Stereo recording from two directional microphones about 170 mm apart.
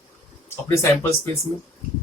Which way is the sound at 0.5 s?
15° left (ahead or behind).